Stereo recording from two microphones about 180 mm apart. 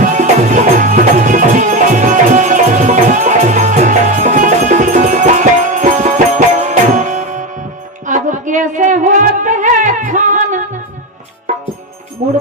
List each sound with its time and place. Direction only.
0.0 s music: 45° right (ahead or behind)
8.0 s a sound: 45° right (ahead or behind)
12.2 s music: 40° right (ahead or behind)